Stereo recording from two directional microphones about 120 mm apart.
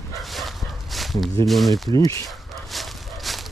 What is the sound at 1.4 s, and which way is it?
Speech, centre (ahead or behind).